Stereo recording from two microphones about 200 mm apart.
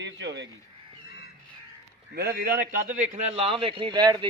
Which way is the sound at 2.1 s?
50° right (ahead or behind).